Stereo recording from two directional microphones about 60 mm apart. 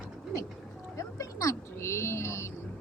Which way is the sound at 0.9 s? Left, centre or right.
Left.